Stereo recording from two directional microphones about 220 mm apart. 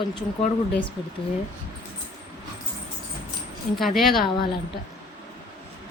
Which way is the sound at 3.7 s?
Centre (ahead or behind).